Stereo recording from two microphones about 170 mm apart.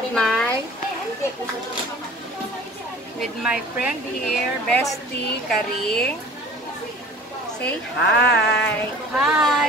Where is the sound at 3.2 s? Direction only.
5° right (ahead or behind).